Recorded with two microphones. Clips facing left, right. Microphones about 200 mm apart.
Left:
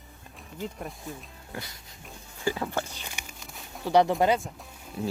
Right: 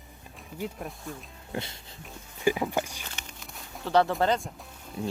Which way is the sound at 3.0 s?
10° left (ahead or behind).